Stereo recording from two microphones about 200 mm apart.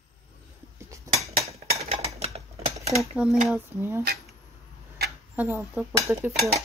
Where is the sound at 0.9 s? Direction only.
15° right (ahead or behind).